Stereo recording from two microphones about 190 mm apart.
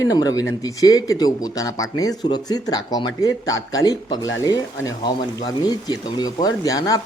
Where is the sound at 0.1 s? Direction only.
20° left (ahead or behind).